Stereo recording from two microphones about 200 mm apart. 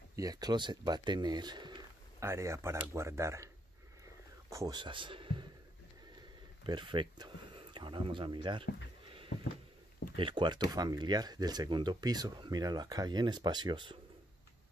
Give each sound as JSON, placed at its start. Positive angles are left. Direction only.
{"t": 0.1, "sound": "speech", "side_deg": -20}
{"t": 4.5, "sound": "speech", "side_deg": -20}
{"t": 6.6, "sound": "speech", "side_deg": -25}
{"t": 10.1, "sound": "speech", "side_deg": -25}